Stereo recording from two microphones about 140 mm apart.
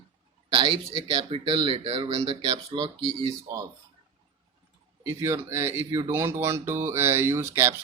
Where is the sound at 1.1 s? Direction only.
40° right (ahead or behind).